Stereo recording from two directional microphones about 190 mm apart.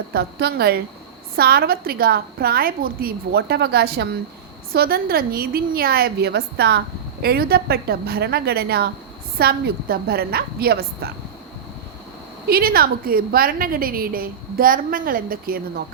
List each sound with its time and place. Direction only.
0.1 s a woman's voice: 60° right (ahead or behind)
12.5 s a woman's voice: 50° right (ahead or behind)